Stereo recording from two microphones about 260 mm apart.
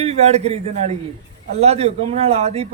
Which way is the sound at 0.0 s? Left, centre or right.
Right.